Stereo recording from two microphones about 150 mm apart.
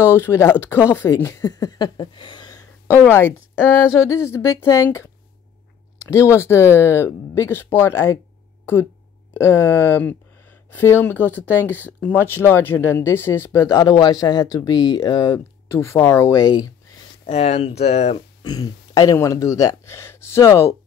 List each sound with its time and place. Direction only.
0.0 s speech: 15° left (ahead or behind)
2.9 s speech: 15° left (ahead or behind)
9.3 s speech: 15° left (ahead or behind)
17.3 s speech: 45° left (ahead or behind)
18.4 s speech: 25° left (ahead or behind)